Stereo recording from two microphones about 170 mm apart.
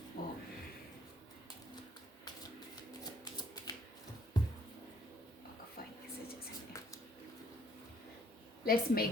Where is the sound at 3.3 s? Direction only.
25° left (ahead or behind).